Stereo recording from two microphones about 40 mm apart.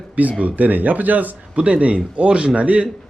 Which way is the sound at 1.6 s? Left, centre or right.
Right.